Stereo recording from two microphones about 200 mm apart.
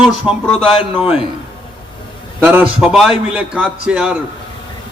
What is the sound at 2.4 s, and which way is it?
A man's voice, 10° right (ahead or behind).